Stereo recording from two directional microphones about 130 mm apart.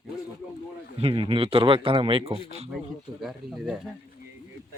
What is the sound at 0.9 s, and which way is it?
Speech, 45° right (ahead or behind).